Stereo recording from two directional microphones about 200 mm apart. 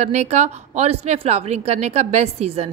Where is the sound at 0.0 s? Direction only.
35° right (ahead or behind).